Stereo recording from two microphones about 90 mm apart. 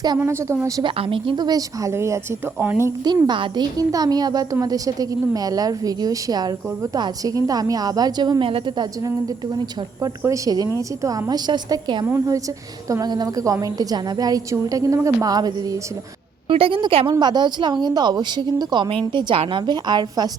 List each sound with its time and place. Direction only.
0.2 s speech: 30° right (ahead or behind)
0.8 s a woman's voice: 75° right (ahead or behind)
1.5 s a woman's voice: 45° right (ahead or behind)
1.9 s speech: 30° right (ahead or behind)
2.6 s a woman's voice: 20° right (ahead or behind)
3.2 s a woman's voice: 60° right (ahead or behind)
8.4 s a woman's voice: 90° right
8.8 s a woman's voice: 45° right (ahead or behind)
11.3 s a woman's voice: 50° right (ahead or behind)
16.5 s a woman's voice: 90° right
17.2 s a woman's voice: 50° right (ahead or behind)
19.1 s a woman's voice: 65° right (ahead or behind); by 20.3 s 50° right (ahead or behind)